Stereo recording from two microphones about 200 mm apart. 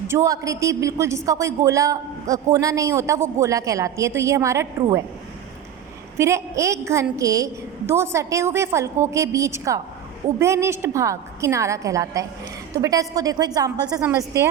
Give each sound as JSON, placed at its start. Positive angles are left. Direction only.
{"t": 0.1, "sound": "a woman's voice", "side_deg": -15}
{"t": 6.1, "sound": "a woman's voice", "side_deg": -15}